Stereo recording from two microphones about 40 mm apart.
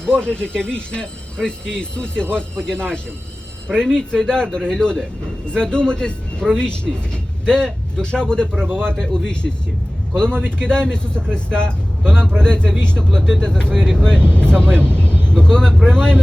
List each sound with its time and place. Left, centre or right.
0.0 s a man's voice: left